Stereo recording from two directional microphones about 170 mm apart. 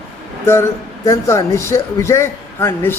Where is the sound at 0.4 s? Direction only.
15° left (ahead or behind).